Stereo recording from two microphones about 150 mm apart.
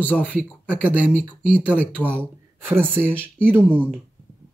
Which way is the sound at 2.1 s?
15° right (ahead or behind).